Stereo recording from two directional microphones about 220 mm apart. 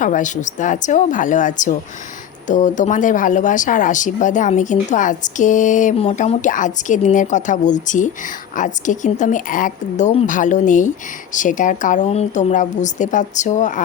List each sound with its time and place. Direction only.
0.0 s speech: 35° left (ahead or behind)